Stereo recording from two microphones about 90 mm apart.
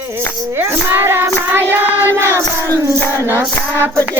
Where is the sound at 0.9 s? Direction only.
25° right (ahead or behind).